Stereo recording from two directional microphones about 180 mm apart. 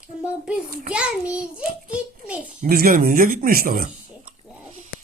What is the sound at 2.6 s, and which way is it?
Speech, 55° right (ahead or behind).